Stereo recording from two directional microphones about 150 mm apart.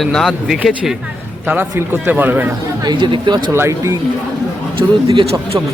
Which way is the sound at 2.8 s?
30° right (ahead or behind).